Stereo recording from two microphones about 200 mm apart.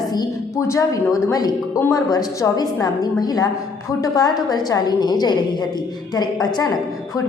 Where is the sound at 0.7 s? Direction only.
15° left (ahead or behind).